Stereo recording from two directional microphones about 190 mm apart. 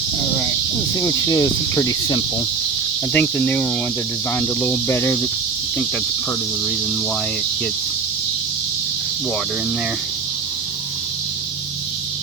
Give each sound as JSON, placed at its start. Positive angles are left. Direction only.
{"t": 0.9, "sound": "speech", "side_deg": 15}
{"t": 3.1, "sound": "speech", "side_deg": 5}